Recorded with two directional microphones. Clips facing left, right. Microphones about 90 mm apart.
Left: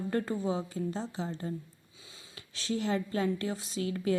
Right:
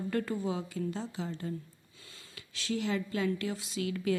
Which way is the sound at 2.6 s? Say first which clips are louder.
Left 1 dB; 35° left (ahead or behind).